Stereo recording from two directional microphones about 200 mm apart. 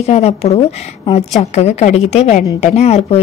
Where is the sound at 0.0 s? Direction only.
30° left (ahead or behind).